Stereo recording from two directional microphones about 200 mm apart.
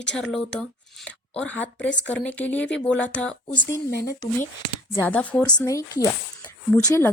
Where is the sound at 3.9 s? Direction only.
55° left (ahead or behind).